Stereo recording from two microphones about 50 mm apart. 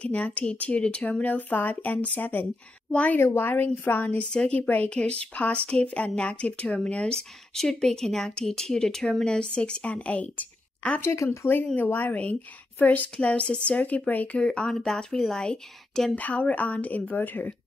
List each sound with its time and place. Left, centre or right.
0.0 s speech: left
3.2 s a woman's voice: left
4.2 s speech: centre
4.6 s speech: left
7.5 s speech: centre; by 11.0 s left
11.0 s speech: left
11.2 s a woman's voice: left
14.9 s speech: centre
16.2 s speech: left